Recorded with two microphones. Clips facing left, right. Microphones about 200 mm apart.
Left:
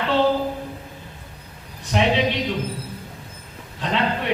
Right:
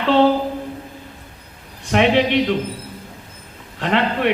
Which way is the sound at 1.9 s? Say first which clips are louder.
Right 5 dB; 65° right (ahead or behind).